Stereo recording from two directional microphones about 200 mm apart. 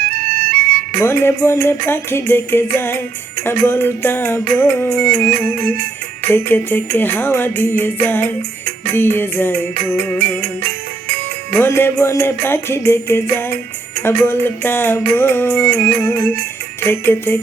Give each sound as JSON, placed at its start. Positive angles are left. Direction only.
{"t": 0.9, "sound": "music", "side_deg": 10}
{"t": 5.5, "sound": "music", "side_deg": -45}
{"t": 6.3, "sound": "music", "side_deg": 10}
{"t": 11.5, "sound": "music", "side_deg": 10}